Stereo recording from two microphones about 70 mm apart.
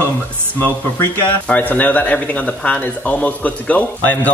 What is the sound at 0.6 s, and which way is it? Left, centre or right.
A man's voice, left.